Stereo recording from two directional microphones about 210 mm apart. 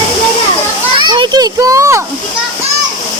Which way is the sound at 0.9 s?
20° right (ahead or behind).